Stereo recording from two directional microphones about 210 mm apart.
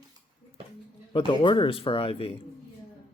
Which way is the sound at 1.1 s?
25° left (ahead or behind).